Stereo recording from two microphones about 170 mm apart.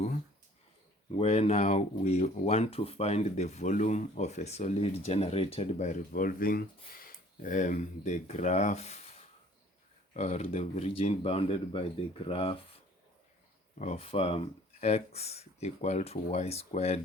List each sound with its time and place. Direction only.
1.2 s speech: 40° left (ahead or behind)
13.7 s speech: 40° left (ahead or behind)